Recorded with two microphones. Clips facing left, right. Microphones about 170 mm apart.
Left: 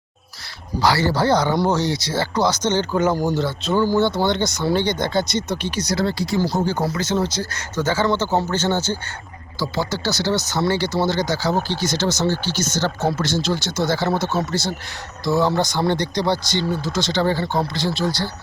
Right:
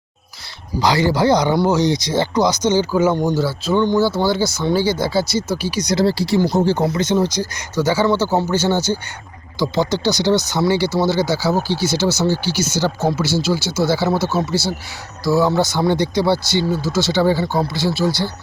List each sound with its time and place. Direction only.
0.8 s speech: 15° right (ahead or behind)
5.8 s speech: 20° right (ahead or behind)
6.1 s speech: 30° right (ahead or behind); by 18.3 s 10° right (ahead or behind)